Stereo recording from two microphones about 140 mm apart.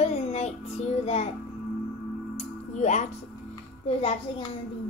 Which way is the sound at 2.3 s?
55° left (ahead or behind).